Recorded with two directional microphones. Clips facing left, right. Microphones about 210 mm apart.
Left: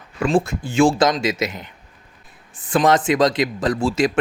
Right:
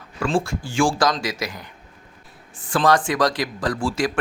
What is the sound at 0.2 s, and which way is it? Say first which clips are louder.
Speech: left 4 dB; 20° left (ahead or behind).